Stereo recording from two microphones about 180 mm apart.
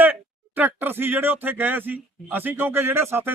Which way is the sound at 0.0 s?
10° right (ahead or behind).